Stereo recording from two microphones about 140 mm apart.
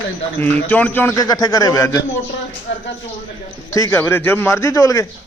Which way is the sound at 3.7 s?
20° left (ahead or behind).